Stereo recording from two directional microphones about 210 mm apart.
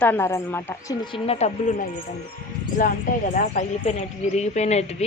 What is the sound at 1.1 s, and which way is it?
Speech, 25° left (ahead or behind).